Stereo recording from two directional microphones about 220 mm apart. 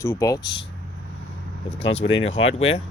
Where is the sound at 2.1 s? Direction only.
60° left (ahead or behind).